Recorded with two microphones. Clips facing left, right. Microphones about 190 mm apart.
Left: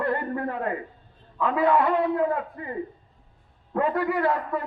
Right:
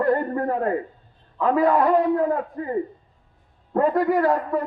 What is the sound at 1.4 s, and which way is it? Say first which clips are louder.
A man's voice: right 3 dB; 40° right (ahead or behind).